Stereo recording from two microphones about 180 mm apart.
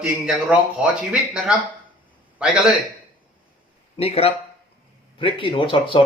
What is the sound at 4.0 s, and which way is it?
Speech, 35° left (ahead or behind).